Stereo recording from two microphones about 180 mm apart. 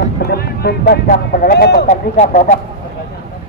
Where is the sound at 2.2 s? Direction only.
40° left (ahead or behind).